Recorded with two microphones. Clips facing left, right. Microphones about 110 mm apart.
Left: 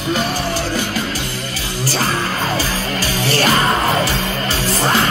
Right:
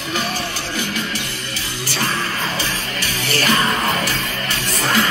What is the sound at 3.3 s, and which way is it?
Music, 35° left (ahead or behind).